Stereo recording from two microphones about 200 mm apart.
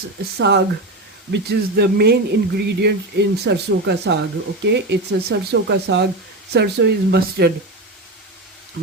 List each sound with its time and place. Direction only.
0.3 s speech: 60° right (ahead or behind)